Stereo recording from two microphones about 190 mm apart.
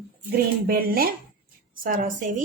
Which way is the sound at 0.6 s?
55° right (ahead or behind).